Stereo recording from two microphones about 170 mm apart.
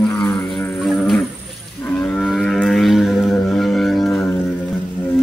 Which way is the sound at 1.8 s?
10° left (ahead or behind).